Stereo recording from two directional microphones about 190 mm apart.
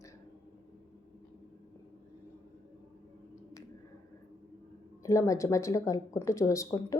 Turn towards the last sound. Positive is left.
turn(degrees=15)  # may be behind; listen again after turning